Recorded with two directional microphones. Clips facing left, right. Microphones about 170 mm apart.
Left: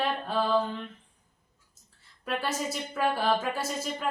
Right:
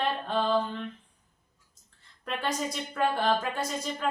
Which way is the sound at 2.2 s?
5° left (ahead or behind).